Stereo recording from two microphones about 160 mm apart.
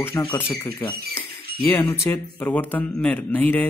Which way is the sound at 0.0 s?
15° left (ahead or behind).